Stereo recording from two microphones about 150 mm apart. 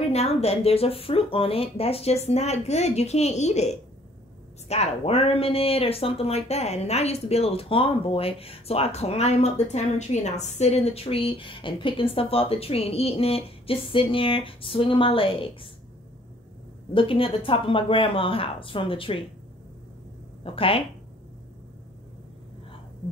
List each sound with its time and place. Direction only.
0.1 s speech: 45° left (ahead or behind)
16.9 s speech: 35° left (ahead or behind)
20.4 s speech: 40° left (ahead or behind)